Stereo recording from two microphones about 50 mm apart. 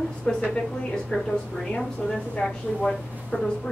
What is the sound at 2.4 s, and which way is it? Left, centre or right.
A woman's voice, centre.